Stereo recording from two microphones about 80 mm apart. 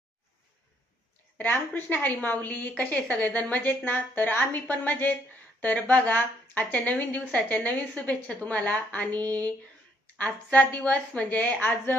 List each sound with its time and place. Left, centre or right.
1.4 s a woman's voice: left